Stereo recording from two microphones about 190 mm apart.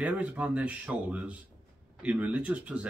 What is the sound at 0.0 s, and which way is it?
Speech, 5° right (ahead or behind).